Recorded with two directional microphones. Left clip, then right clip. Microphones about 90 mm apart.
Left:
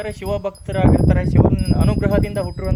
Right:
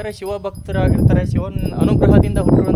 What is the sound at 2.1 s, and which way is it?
Speech, 10° right (ahead or behind).